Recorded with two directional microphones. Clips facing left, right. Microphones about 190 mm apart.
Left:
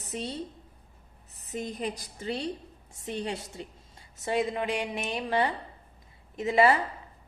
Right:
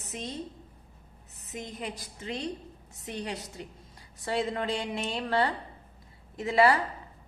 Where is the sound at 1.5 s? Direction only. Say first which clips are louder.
Left 4 dB; 35° left (ahead or behind).